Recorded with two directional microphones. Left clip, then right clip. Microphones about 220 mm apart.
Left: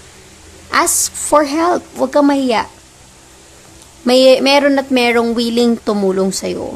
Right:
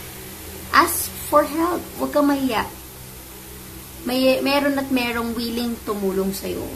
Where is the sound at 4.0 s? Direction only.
35° left (ahead or behind).